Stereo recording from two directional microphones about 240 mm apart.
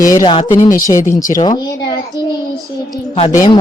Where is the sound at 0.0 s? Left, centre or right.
Centre.